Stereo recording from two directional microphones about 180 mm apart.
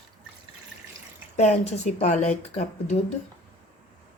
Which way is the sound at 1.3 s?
35° left (ahead or behind).